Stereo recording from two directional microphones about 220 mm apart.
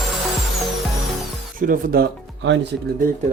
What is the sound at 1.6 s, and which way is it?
Speech, 40° right (ahead or behind).